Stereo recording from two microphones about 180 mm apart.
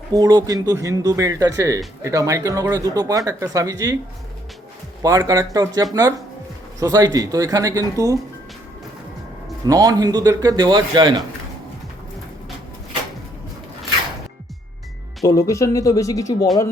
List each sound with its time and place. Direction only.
0.1 s speech: 20° right (ahead or behind)
5.0 s speech: 20° right (ahead or behind)
9.6 s speech: 20° right (ahead or behind)
15.2 s speech: 20° left (ahead or behind)